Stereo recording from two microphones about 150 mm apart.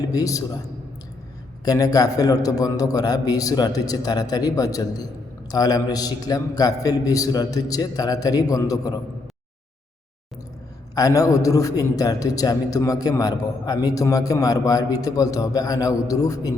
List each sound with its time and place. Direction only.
0.0 s a man's voice: 25° left (ahead or behind)
1.6 s a man's voice: 25° left (ahead or behind)
10.9 s a man's voice: 25° left (ahead or behind)